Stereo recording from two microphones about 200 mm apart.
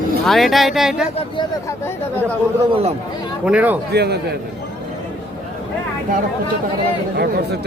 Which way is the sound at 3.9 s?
55° right (ahead or behind).